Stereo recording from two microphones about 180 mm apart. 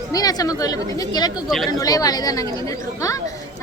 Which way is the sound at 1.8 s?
20° left (ahead or behind).